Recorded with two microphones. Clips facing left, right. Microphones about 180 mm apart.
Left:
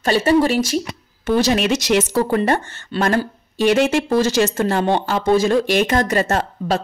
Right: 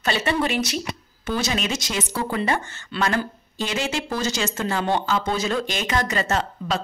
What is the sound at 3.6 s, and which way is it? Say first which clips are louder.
A woman's voice: left 11 dB; 60° left (ahead or behind).